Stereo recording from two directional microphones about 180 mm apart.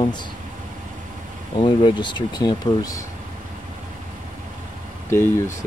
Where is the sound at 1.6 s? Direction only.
25° left (ahead or behind).